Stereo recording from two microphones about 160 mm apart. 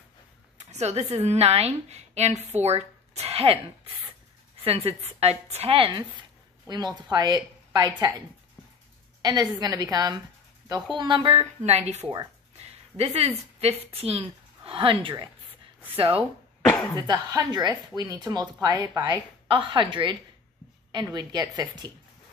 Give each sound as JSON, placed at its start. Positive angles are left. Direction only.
{"t": 0.6, "sound": "a woman's voice", "side_deg": -45}
{"t": 9.2, "sound": "a woman's voice", "side_deg": -25}
{"t": 17.1, "sound": "speech", "side_deg": -25}